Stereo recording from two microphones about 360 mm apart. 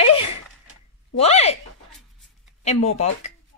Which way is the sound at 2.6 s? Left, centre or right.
Centre.